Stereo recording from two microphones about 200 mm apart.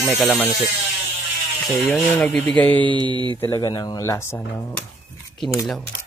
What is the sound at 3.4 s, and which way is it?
Speech, 20° left (ahead or behind).